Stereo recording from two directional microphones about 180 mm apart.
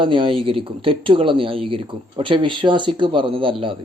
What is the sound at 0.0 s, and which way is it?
Speech, 25° right (ahead or behind).